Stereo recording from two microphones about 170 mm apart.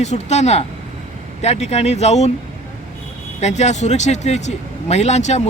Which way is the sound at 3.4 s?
40° left (ahead or behind).